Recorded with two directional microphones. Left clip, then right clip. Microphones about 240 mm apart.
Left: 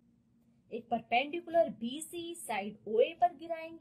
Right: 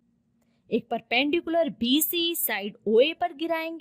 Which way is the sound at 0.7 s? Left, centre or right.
Right.